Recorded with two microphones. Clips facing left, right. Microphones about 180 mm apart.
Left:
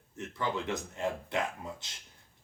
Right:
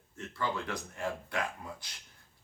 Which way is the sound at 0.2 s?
20° left (ahead or behind).